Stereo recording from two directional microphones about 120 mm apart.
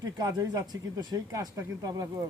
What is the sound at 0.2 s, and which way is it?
Speech, 30° right (ahead or behind).